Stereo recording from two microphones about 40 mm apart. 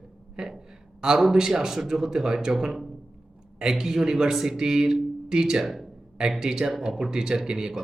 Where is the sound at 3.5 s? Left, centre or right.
Centre.